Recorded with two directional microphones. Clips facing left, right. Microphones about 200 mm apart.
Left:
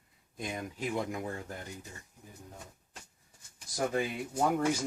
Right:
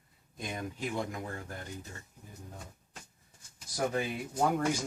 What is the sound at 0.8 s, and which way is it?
Speech, 20° left (ahead or behind).